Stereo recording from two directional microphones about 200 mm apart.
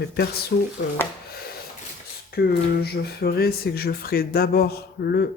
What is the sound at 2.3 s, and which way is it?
Speech, 50° left (ahead or behind).